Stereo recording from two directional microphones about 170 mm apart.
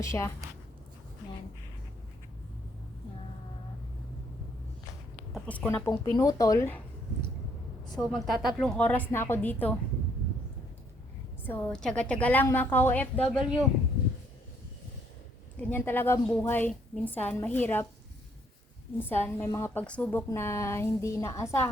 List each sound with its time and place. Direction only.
0.0 s a woman's voice: 15° left (ahead or behind)
5.3 s a woman's voice: 10° left (ahead or behind)
7.9 s a woman's voice: centre (ahead or behind)
11.4 s a woman's voice: 10° left (ahead or behind)
15.5 s a woman's voice: 10° left (ahead or behind)
18.9 s a woman's voice: 10° left (ahead or behind)